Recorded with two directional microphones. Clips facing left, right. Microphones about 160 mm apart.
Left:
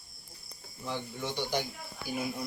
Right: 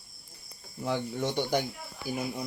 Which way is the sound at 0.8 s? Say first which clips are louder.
Right 6 dB; 70° right (ahead or behind).